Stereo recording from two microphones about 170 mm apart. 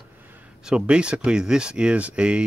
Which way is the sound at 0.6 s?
5° right (ahead or behind).